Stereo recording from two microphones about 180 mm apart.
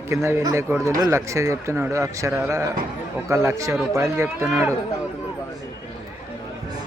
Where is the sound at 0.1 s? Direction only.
15° right (ahead or behind).